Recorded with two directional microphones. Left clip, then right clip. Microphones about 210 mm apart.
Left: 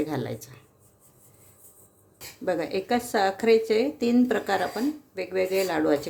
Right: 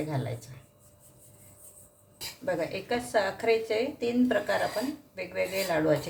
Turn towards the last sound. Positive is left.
turn(degrees=50)  # may be behind; listen again after turning